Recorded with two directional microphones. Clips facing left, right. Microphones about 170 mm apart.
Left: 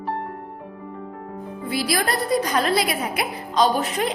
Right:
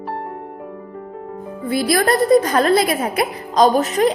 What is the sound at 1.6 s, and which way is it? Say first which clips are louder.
A woman's voice: right 7 dB; 50° right (ahead or behind).